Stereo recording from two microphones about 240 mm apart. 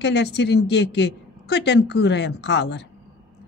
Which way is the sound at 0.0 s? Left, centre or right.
Left.